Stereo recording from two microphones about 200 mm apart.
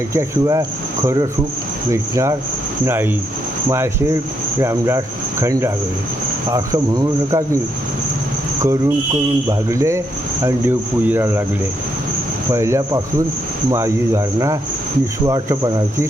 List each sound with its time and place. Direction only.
0.1 s speech: 15° right (ahead or behind)
1.9 s speech: 15° right (ahead or behind)
9.5 s speech: 15° right (ahead or behind)
12.5 s speech: 15° right (ahead or behind)